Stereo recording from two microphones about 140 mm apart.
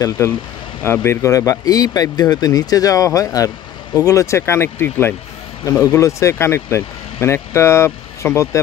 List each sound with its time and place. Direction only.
0.8 s speech: 15° left (ahead or behind)